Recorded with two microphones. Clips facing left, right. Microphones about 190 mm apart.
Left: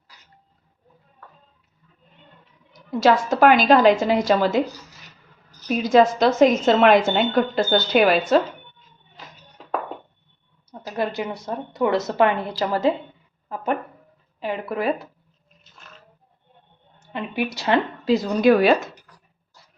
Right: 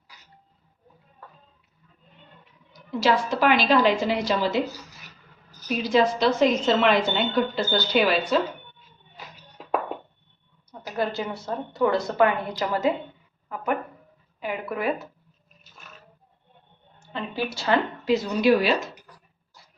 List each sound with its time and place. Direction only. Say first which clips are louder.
3.0 s a woman's voice: left 5 dB; 45° left (ahead or behind)
5.6 s a woman's voice: left 5 dB; 45° left (ahead or behind)
10.7 s a woman's voice: left 2 dB; 20° left (ahead or behind)
14.3 s a woman's voice: left 3 dB; 30° left (ahead or behind)
17.1 s a woman's voice: left 3 dB; 20° left (ahead or behind)
18.0 s a woman's voice: left 5 dB; 35° left (ahead or behind)